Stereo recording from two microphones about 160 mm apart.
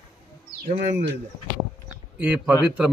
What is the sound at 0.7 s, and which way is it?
Speech, 45° right (ahead or behind).